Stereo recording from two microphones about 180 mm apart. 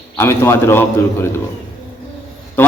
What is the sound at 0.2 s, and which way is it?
Speech, 15° left (ahead or behind).